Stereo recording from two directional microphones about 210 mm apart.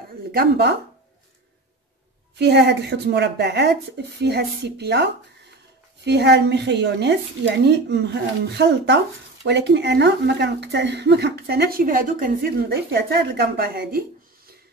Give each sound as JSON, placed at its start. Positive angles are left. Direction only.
{"t": 0.3, "sound": "speech", "side_deg": -50}
{"t": 2.3, "sound": "speech", "side_deg": -50}